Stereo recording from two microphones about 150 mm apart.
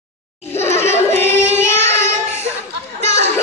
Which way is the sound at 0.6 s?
45° left (ahead or behind).